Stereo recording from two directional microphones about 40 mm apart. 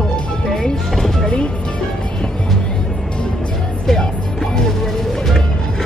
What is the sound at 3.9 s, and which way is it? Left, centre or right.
Music, centre.